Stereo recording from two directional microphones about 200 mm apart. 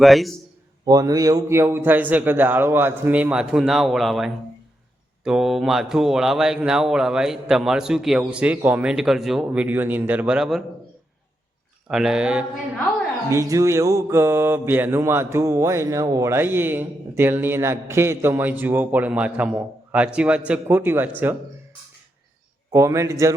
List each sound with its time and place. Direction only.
0.0 s a man's voice: centre (ahead or behind)
0.9 s mantra: 20° right (ahead or behind); by 4.3 s centre (ahead or behind)
5.2 s a man's voice: centre (ahead or behind)
11.9 s a man's voice: centre (ahead or behind)
13.3 s mantra: 15° right (ahead or behind)
22.7 s mantra: 15° right (ahead or behind)